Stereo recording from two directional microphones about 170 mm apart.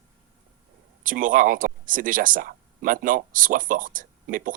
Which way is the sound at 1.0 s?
55° right (ahead or behind).